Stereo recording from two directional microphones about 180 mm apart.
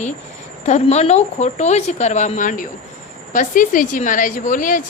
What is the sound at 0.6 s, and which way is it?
Speech, 40° left (ahead or behind).